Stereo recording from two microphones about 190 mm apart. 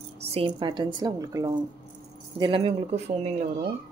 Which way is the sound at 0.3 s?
30° right (ahead or behind).